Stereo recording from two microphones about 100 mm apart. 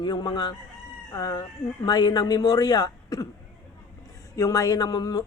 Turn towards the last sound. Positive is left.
turn(degrees=40)  # may be behind; listen again after turning